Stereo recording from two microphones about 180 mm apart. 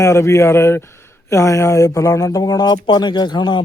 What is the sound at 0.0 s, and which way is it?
Speech, 15° left (ahead or behind).